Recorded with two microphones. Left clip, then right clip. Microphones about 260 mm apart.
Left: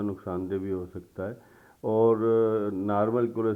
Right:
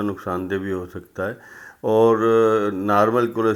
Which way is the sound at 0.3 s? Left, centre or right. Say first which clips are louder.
Right 5 dB; right.